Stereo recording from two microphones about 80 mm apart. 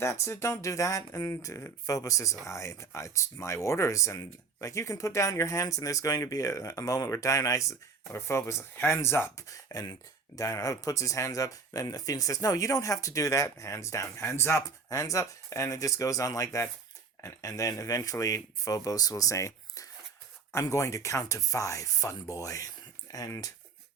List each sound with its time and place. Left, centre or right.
0.0 s speech: left
9.5 s speech: left